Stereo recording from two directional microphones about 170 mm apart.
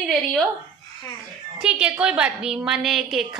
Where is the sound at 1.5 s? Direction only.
5° right (ahead or behind).